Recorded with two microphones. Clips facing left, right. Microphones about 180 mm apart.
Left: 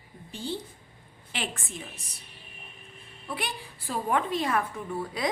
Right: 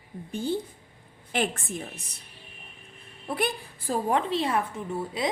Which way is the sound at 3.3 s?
50° right (ahead or behind).